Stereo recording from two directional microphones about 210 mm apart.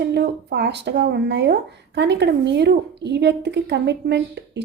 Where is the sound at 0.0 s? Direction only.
55° right (ahead or behind).